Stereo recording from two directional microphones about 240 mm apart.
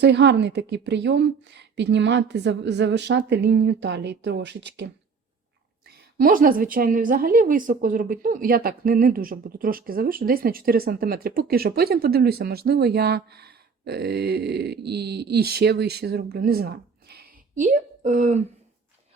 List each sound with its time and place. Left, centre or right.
0.0 s a woman's voice: right
6.1 s a woman's voice: right